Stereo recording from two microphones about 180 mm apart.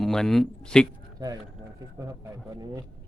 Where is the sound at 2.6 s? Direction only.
20° right (ahead or behind).